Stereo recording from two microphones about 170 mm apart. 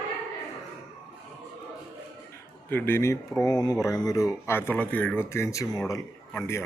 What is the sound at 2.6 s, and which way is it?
Speech, 10° left (ahead or behind).